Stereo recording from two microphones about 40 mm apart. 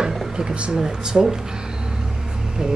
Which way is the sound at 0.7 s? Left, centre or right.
Centre.